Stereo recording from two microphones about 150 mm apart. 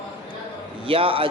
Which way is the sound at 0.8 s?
40° right (ahead or behind).